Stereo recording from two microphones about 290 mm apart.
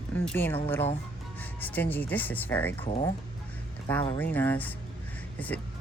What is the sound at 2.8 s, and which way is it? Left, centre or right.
Speech, left.